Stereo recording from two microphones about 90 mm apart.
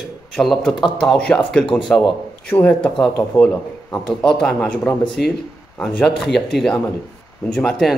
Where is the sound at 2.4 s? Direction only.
15° left (ahead or behind).